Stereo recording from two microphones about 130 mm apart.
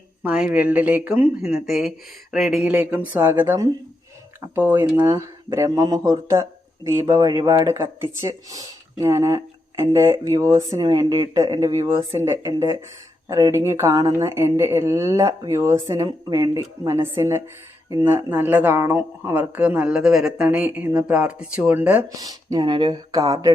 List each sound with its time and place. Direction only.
0.2 s speech: 10° right (ahead or behind)
1.6 s speech: centre (ahead or behind); by 5.0 s 15° right (ahead or behind)
5.0 s speech: 30° right (ahead or behind); by 22.0 s 10° right (ahead or behind)
22.1 s speech: 25° right (ahead or behind)